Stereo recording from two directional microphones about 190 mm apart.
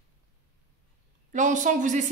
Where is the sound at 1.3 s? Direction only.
40° right (ahead or behind).